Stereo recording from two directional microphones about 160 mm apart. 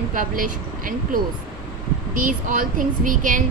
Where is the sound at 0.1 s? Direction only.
60° right (ahead or behind).